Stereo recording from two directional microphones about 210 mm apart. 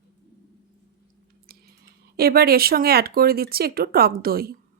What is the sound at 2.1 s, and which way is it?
Speech, 45° right (ahead or behind).